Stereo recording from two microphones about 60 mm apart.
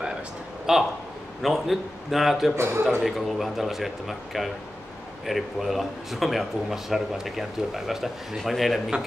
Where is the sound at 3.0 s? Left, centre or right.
Centre.